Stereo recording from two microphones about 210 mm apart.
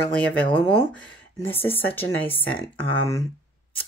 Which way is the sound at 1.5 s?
10° left (ahead or behind).